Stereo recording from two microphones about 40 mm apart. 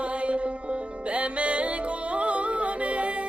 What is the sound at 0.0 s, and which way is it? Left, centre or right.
Music, right.